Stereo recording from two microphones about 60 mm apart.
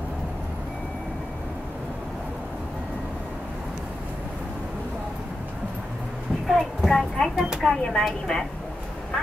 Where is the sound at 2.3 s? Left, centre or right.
Centre.